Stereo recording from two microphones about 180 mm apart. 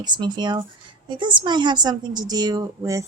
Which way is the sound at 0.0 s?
25° right (ahead or behind).